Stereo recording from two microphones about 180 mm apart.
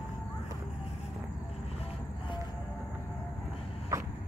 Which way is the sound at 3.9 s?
15° right (ahead or behind).